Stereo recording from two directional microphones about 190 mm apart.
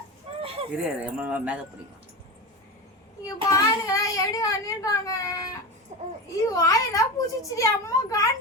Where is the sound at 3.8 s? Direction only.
20° left (ahead or behind).